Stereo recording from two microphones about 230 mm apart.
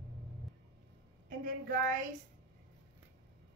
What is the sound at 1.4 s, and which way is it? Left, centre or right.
Speech, right.